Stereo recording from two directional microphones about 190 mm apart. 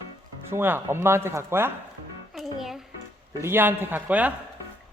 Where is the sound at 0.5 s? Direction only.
10° right (ahead or behind).